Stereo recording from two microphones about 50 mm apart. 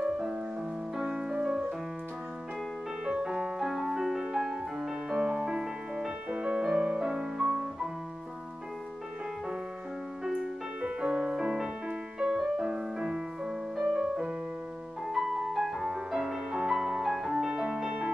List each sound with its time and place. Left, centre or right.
1.0 s music: centre
3.1 s music: centre
10.2 s music: centre